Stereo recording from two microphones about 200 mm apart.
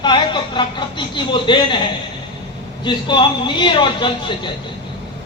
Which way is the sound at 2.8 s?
25° left (ahead or behind).